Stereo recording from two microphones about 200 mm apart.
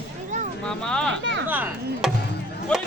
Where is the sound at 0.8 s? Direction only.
5° left (ahead or behind).